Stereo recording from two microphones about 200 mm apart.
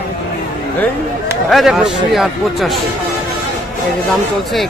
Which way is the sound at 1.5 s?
Centre (ahead or behind).